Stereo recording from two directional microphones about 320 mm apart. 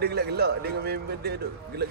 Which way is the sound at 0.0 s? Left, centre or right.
Right.